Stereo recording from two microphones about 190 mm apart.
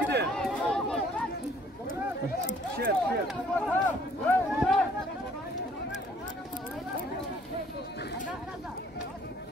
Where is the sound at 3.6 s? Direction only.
5° left (ahead or behind).